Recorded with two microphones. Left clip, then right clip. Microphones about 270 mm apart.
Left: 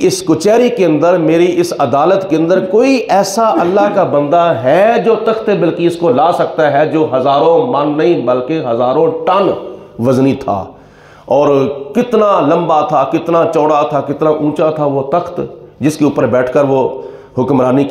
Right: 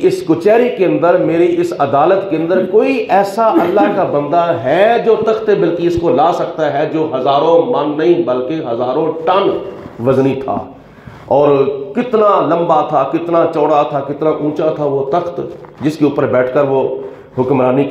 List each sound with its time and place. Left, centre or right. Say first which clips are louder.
0.0 s a man's voice: left 1 dB; left
11.2 s a man's voice: even; left